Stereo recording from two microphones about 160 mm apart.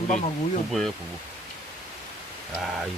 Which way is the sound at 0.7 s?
Centre (ahead or behind).